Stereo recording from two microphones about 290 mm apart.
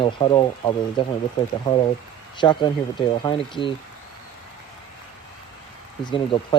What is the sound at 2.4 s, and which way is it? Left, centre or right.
Speech, centre.